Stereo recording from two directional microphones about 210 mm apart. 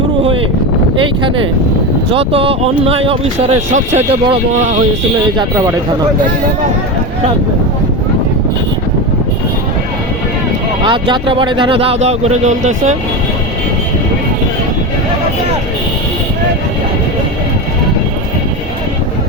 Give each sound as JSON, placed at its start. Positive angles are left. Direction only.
{"t": 2.0, "sound": "speech", "side_deg": -25}
{"t": 5.4, "sound": "speech", "side_deg": -15}
{"t": 10.8, "sound": "speech", "side_deg": -25}